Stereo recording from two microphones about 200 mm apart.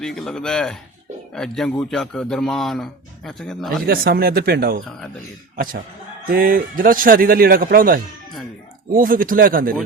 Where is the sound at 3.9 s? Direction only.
50° right (ahead or behind).